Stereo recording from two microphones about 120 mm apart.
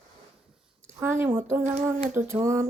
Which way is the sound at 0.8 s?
20° right (ahead or behind).